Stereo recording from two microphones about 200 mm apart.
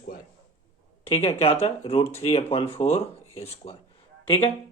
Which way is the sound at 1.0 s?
30° left (ahead or behind).